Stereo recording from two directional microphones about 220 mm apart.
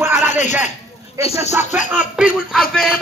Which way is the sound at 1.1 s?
30° left (ahead or behind).